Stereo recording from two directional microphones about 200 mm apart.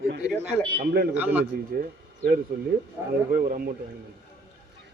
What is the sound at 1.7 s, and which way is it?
Speech, 50° right (ahead or behind).